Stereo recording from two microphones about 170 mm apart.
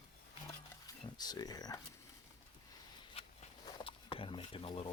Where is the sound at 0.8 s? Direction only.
25° left (ahead or behind).